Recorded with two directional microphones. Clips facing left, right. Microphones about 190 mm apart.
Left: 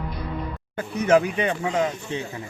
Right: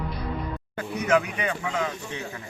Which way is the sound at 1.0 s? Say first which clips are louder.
Left 5 dB; 30° left (ahead or behind).